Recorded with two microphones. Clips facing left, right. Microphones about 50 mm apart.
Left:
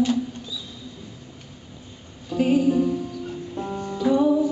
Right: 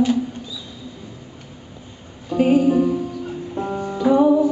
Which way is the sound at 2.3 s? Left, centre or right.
Centre.